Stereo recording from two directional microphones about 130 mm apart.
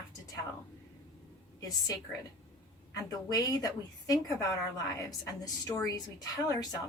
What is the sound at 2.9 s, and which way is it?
Speech, 30° left (ahead or behind).